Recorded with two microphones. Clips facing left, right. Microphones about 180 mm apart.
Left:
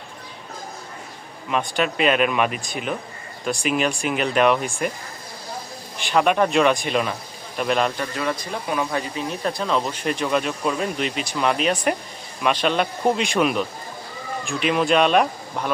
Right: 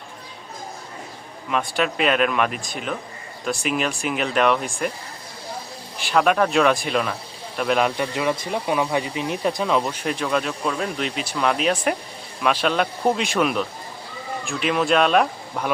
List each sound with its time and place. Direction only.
1.5 s speech: centre (ahead or behind)
6.0 s speech: centre (ahead or behind)
7.8 s speech: 10° right (ahead or behind)
8.1 s speech: 20° right (ahead or behind)
10.0 s speech: 5° left (ahead or behind)